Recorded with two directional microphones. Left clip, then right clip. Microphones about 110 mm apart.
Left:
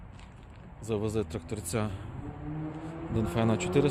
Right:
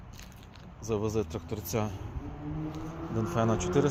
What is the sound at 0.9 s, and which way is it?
Speech, 10° left (ahead or behind).